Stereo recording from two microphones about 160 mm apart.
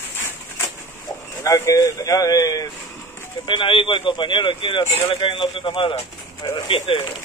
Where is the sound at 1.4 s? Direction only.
20° left (ahead or behind).